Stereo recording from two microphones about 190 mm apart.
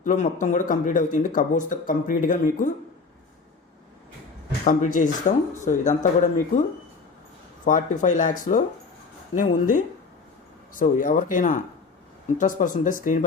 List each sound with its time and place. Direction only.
0.0 s speech: 40° left (ahead or behind)
4.6 s speech: 40° left (ahead or behind)